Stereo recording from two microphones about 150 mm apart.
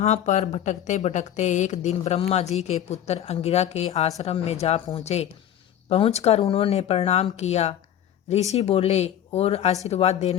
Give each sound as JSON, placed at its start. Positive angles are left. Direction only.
{"t": 0.0, "sound": "a woman's voice", "side_deg": 50}